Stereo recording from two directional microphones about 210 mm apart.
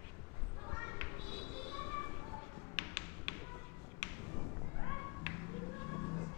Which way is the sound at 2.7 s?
10° left (ahead or behind).